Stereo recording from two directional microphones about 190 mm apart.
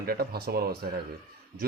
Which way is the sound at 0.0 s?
55° right (ahead or behind).